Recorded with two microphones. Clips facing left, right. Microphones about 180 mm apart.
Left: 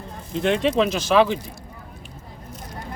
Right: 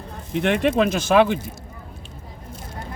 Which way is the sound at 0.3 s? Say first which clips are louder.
Right 1 dB; 65° right (ahead or behind).